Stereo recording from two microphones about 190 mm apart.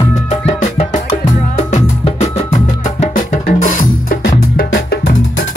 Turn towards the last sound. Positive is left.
turn(degrees=55)  # may be behind; listen again after turning